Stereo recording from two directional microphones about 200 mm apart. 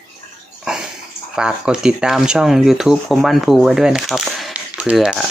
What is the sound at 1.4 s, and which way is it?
Speech, 5° right (ahead or behind).